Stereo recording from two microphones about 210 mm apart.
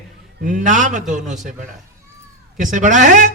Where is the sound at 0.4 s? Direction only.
40° right (ahead or behind).